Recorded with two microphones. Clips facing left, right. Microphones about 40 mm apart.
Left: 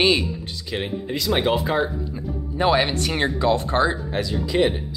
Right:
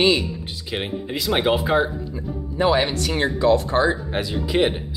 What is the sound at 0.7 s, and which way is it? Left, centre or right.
Speech, centre.